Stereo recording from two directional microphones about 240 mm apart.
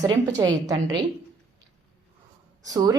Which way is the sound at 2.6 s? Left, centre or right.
Centre.